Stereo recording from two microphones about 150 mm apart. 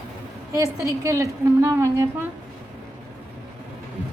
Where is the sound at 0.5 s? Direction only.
20° right (ahead or behind).